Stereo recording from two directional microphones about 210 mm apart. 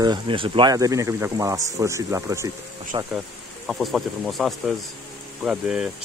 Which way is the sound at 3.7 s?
Centre (ahead or behind).